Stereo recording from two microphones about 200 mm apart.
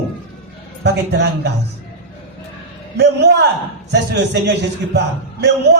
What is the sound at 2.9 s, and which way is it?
A man's voice, 55° right (ahead or behind).